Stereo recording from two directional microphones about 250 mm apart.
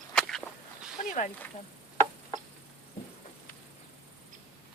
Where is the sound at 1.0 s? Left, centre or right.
Left.